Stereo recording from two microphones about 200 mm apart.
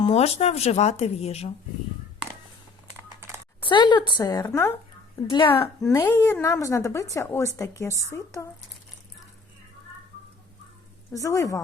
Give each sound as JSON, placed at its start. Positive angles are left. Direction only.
{"t": 0.0, "sound": "speech", "side_deg": 30}
{"t": 3.2, "sound": "typing", "side_deg": -10}
{"t": 3.6, "sound": "a woman's voice", "side_deg": 25}
{"t": 5.9, "sound": "a woman's voice", "side_deg": 10}
{"t": 11.1, "sound": "a woman's voice", "side_deg": 15}